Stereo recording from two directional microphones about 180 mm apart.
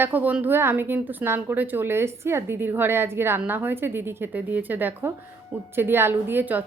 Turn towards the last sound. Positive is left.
turn(degrees=-10)  # may be behind; listen again after turning